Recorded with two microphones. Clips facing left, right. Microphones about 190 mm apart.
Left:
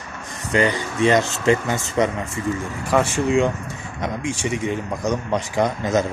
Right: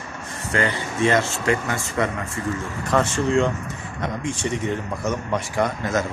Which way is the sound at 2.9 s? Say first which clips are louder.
Left 1 dB; 10° left (ahead or behind).